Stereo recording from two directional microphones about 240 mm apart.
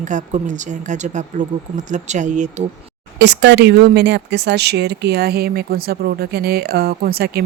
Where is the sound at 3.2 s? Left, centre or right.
Right.